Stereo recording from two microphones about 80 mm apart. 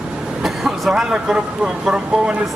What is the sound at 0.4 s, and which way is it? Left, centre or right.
A man's voice, centre.